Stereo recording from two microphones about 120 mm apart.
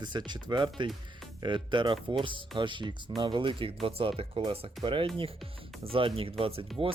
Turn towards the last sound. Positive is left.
turn(degrees=-50)  # may be behind; listen again after turning